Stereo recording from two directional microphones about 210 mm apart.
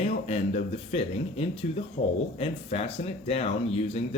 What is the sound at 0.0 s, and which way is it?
Speech, 30° left (ahead or behind).